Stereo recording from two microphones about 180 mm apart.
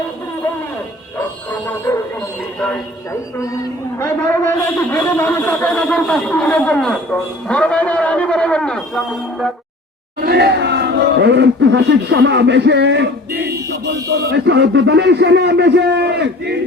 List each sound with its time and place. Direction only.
1.5 s dog: 10° left (ahead or behind)
3.1 s a man's voice: 15° left (ahead or behind); by 9.5 s centre (ahead or behind)
10.2 s speech: 60° right (ahead or behind)